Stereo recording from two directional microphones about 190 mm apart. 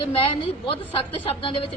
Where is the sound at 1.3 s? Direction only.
30° left (ahead or behind).